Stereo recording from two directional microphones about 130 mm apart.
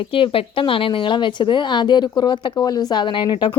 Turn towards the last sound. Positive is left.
turn(degrees=40)  # may be behind; listen again after turning